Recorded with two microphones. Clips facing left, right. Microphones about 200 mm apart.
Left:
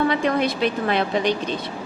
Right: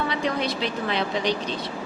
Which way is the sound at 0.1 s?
55° left (ahead or behind).